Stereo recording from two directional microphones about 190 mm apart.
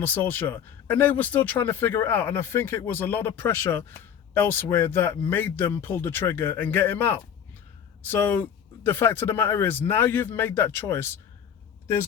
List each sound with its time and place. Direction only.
0.0 s speech: 10° left (ahead or behind)